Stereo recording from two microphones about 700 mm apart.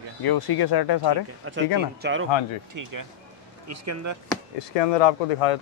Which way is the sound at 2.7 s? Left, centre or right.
Right.